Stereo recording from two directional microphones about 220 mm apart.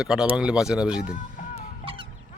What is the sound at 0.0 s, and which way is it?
Speech, 5° right (ahead or behind).